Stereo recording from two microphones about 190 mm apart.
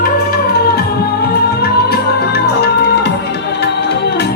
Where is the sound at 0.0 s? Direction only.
55° left (ahead or behind).